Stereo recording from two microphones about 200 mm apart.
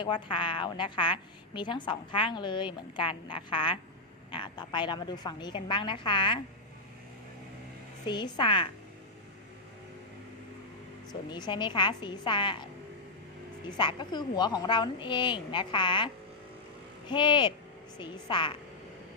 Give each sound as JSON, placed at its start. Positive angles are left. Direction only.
{"t": 0.0, "sound": "a woman's voice", "side_deg": 25}
{"t": 8.0, "sound": "a woman's voice", "side_deg": 20}
{"t": 11.1, "sound": "a woman's voice", "side_deg": 20}
{"t": 13.7, "sound": "a woman's voice", "side_deg": 25}
{"t": 17.1, "sound": "a woman's voice", "side_deg": 25}